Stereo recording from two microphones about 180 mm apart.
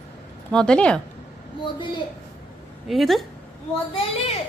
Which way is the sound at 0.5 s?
5° left (ahead or behind).